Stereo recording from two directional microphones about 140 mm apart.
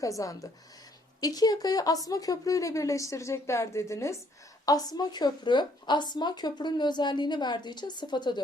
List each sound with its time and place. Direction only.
0.0 s a woman's voice: 25° left (ahead or behind)